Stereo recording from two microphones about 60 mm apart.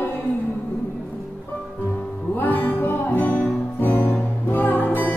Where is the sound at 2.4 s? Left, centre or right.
Left.